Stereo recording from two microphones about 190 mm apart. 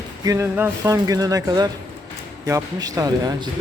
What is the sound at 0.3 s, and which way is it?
Speech, 15° right (ahead or behind).